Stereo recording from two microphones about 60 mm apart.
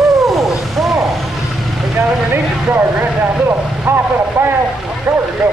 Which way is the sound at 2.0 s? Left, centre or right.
Right.